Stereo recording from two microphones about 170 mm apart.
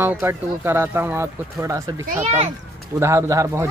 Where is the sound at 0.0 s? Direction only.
15° right (ahead or behind).